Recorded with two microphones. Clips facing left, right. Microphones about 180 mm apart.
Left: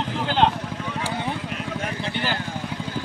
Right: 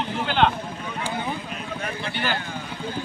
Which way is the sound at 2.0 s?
25° left (ahead or behind).